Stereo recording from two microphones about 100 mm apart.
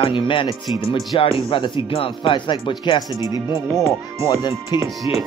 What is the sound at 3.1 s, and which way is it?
Speech, 35° right (ahead or behind).